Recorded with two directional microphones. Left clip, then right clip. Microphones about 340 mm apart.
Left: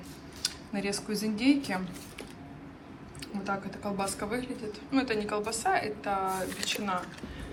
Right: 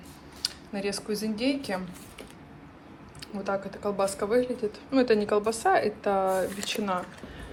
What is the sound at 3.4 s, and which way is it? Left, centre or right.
A child's voice, centre.